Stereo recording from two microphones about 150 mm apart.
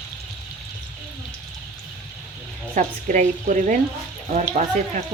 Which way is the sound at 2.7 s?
55° right (ahead or behind).